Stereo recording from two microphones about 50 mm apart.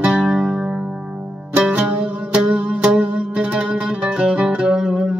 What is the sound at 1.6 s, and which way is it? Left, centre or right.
Zither, centre.